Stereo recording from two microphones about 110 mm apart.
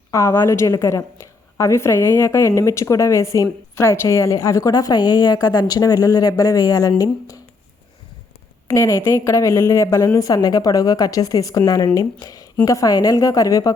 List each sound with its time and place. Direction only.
0.1 s a woman's voice: 25° left (ahead or behind)
8.6 s a woman's voice: 30° left (ahead or behind)